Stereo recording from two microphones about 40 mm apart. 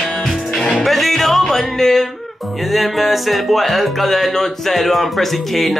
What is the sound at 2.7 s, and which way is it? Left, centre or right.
Music, centre.